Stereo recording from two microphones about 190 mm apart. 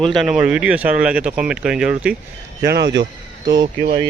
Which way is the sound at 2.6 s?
60° right (ahead or behind).